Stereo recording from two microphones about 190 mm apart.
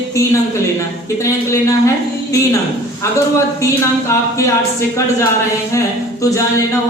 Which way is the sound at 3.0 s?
15° left (ahead or behind).